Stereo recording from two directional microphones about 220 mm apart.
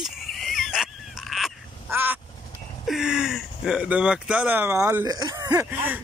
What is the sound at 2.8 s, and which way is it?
Speech, 5° right (ahead or behind).